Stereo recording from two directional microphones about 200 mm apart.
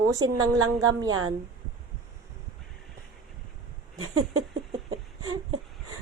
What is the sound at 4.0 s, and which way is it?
Speech, 90° right.